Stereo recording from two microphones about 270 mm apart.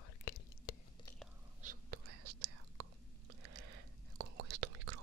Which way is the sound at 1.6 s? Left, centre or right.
Right.